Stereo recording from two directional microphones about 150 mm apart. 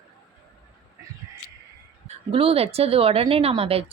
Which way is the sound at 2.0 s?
40° right (ahead or behind).